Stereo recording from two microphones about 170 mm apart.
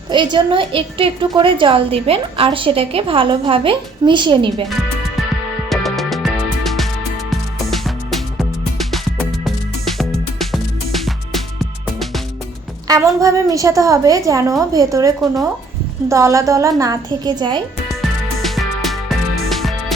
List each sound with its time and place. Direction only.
0.1 s a woman's voice: 30° right (ahead or behind)
5.6 s music: centre (ahead or behind)
10.0 s music: centre (ahead or behind)
12.9 s a woman's voice: 20° right (ahead or behind)
18.4 s music: centre (ahead or behind)